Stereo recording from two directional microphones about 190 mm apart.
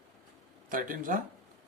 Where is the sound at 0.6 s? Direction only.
45° right (ahead or behind).